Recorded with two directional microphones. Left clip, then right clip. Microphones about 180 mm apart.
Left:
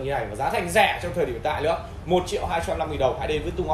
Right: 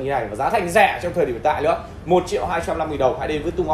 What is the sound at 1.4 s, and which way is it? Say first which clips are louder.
Speech: right 6 dB; 40° right (ahead or behind).